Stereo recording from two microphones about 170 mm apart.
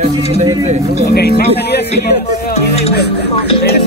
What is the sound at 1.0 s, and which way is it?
Speech, 65° left (ahead or behind).